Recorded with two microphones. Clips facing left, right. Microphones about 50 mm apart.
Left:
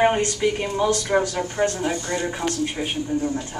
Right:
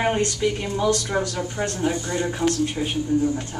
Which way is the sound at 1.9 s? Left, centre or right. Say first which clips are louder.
Even; left.